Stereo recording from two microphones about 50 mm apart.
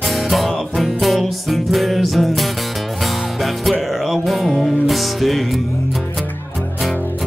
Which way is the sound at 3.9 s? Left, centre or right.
Centre.